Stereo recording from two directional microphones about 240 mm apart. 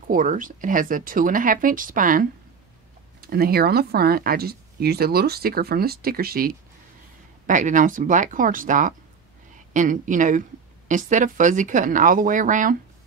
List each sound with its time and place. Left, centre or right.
0.1 s speech: right